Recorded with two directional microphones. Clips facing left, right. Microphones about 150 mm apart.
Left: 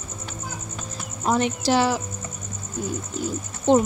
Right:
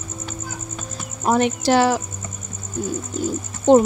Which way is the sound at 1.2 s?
60° right (ahead or behind).